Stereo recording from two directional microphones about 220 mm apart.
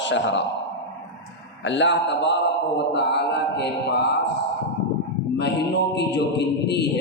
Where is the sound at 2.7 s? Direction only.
50° left (ahead or behind).